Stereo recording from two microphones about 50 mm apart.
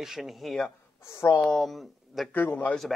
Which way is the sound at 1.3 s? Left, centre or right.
Centre.